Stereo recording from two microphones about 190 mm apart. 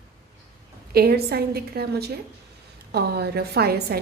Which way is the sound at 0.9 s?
55° right (ahead or behind).